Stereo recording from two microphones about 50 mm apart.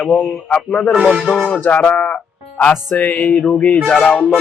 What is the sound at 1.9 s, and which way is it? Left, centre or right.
Music, left.